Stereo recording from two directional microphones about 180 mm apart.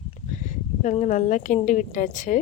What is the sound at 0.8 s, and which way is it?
Speech, 40° left (ahead or behind).